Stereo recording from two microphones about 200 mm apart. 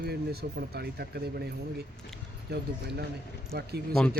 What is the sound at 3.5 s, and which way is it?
Speech, 50° right (ahead or behind).